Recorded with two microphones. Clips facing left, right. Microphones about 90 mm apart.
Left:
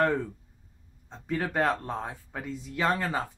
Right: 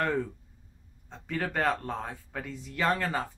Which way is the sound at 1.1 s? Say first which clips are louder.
Left 2 dB; 10° left (ahead or behind).